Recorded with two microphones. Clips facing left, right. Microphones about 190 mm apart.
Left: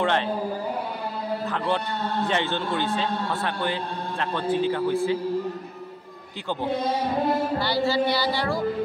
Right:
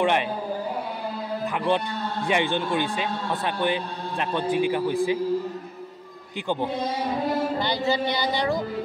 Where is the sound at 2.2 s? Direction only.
15° right (ahead or behind).